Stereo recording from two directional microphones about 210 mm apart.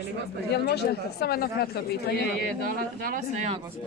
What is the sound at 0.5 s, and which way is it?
Speech, 50° left (ahead or behind).